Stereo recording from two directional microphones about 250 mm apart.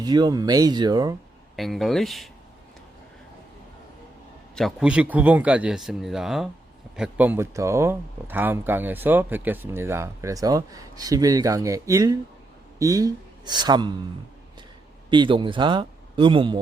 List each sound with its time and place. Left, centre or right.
0.0 s speech: centre
1.5 s speech: centre
4.5 s speech: centre
15.1 s speech: centre